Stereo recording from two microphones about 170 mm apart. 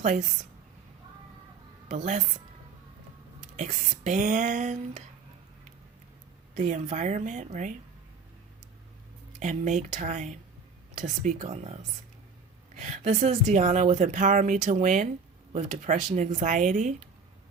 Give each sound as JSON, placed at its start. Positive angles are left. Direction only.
{"t": 0.0, "sound": "a woman's voice", "side_deg": -45}
{"t": 2.0, "sound": "a woman's voice", "side_deg": -45}
{"t": 3.4, "sound": "a woman's voice", "side_deg": -45}
{"t": 6.5, "sound": "a woman's voice", "side_deg": -45}
{"t": 9.4, "sound": "a woman's voice", "side_deg": -45}